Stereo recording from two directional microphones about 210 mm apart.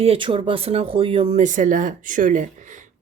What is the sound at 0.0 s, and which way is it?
Speech, 25° right (ahead or behind).